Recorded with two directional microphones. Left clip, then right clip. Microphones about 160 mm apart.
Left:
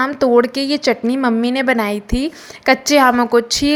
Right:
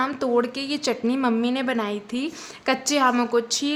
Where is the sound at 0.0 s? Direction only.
30° left (ahead or behind).